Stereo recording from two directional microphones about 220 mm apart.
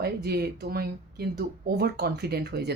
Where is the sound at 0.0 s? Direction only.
45° right (ahead or behind).